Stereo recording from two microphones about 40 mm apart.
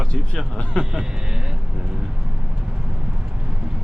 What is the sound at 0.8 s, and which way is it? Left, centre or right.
Speech, left.